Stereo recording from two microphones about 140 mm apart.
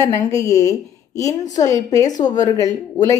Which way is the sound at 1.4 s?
60° left (ahead or behind).